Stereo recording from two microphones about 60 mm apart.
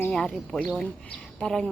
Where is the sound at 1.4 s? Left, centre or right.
Centre.